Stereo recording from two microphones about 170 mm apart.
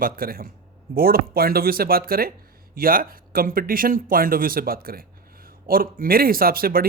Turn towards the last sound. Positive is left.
turn(degrees=-60)  # may be behind; listen again after turning